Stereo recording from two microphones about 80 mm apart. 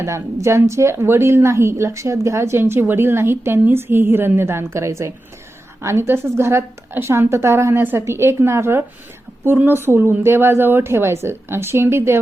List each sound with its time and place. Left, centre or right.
0.0 s a woman's voice: right